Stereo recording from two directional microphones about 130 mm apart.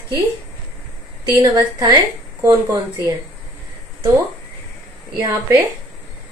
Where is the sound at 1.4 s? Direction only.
30° right (ahead or behind).